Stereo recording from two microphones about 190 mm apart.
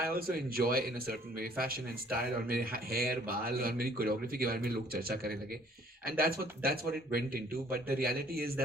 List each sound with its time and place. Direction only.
0.1 s speech: 50° right (ahead or behind)